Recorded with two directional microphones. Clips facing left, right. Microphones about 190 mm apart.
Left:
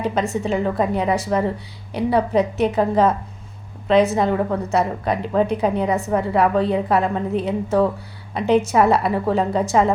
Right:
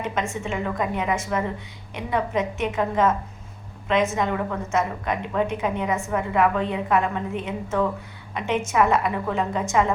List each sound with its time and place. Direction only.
0.0 s a woman's voice: 35° left (ahead or behind)